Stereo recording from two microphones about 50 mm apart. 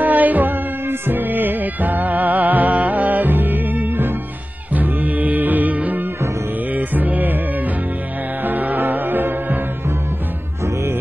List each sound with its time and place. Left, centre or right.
0.0 s music: right
8.5 s music: right